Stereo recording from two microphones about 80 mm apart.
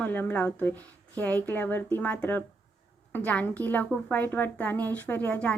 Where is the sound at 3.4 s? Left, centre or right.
Left.